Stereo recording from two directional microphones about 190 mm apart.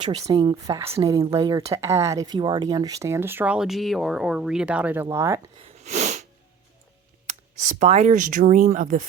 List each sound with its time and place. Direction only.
0.0 s speech: 25° right (ahead or behind)
5.6 s sneeze: 35° right (ahead or behind)
7.3 s speech: 40° right (ahead or behind)